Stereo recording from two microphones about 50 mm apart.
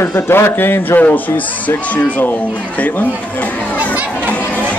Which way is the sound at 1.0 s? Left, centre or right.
Left.